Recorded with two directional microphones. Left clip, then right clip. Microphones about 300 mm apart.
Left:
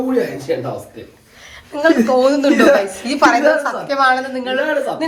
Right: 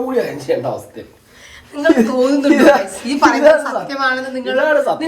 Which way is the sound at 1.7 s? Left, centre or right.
Centre.